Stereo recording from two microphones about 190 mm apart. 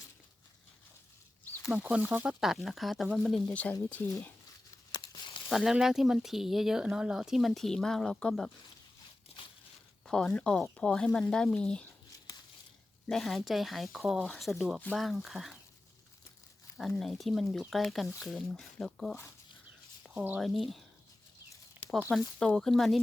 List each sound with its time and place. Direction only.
1.7 s speech: 5° right (ahead or behind)
4.9 s tearing: 20° left (ahead or behind)
5.5 s speech: centre (ahead or behind)
10.1 s speech: 5° left (ahead or behind)
13.1 s speech: centre (ahead or behind)
16.7 s speech: centre (ahead or behind)
20.1 s speech: 5° right (ahead or behind)
22.4 s speech: 5° left (ahead or behind)